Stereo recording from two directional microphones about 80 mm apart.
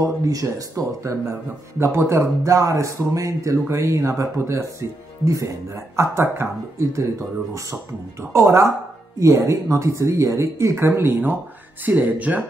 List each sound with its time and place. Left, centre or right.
0.0 s speech: right
12.0 s speech: centre